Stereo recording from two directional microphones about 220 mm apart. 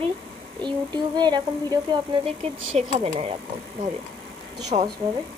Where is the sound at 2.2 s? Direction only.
30° right (ahead or behind).